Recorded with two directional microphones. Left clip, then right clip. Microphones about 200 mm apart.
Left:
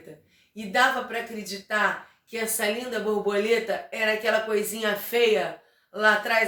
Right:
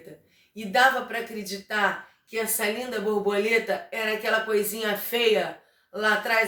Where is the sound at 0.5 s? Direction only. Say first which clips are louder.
Right 2 dB; 15° right (ahead or behind).